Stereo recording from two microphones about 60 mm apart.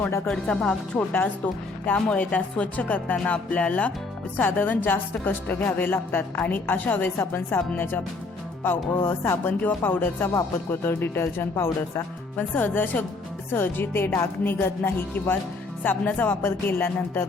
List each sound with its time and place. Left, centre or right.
0.3 s speech: centre
1.9 s a woman's voice: left
8.6 s a woman's voice: left
12.4 s a woman's voice: left
16.4 s a woman's voice: left